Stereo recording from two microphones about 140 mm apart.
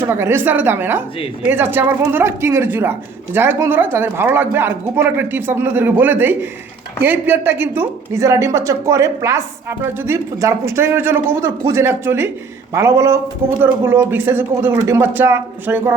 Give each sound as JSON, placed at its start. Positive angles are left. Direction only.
{"t": 0.0, "sound": "a woman's voice", "side_deg": -15}